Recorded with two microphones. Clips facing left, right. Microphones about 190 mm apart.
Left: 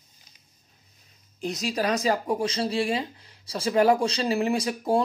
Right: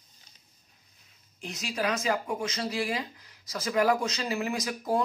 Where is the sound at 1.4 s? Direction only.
40° left (ahead or behind).